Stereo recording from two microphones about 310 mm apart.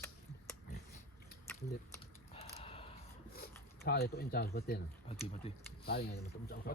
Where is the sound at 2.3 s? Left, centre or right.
Centre.